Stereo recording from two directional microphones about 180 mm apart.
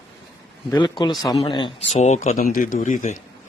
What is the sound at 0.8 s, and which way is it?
Speech, 25° left (ahead or behind).